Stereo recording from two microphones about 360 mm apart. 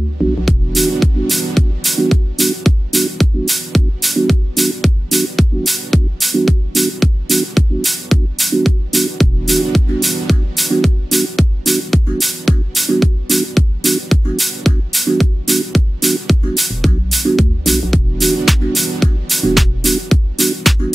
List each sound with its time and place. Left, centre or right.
0.5 s music: centre